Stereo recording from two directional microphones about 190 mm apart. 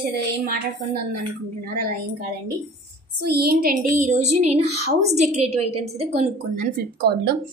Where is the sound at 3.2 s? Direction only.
55° right (ahead or behind); by 6.6 s 35° right (ahead or behind).